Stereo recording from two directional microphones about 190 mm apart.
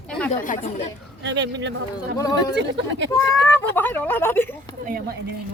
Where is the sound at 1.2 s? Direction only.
70° right (ahead or behind).